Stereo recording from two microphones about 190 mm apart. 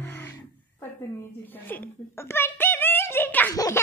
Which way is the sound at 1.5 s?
10° left (ahead or behind).